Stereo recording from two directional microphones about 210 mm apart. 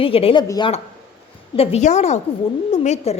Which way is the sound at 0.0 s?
25° left (ahead or behind).